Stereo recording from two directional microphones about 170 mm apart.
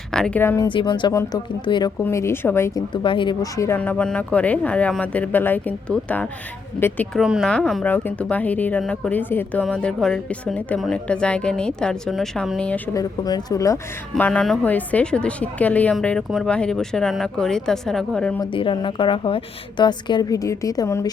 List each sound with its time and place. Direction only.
0.1 s speech: 5° left (ahead or behind)
0.7 s a woman's voice: 25° left (ahead or behind)
2.9 s a woman's voice: 30° left (ahead or behind)
3.6 s speech: 10° left (ahead or behind)
7.2 s a woman's voice: 5° right (ahead or behind)
12.9 s a woman's voice: 20° left (ahead or behind)
14.1 s a woman's voice: 10° left (ahead or behind)
18.3 s a woman's voice: 30° left (ahead or behind)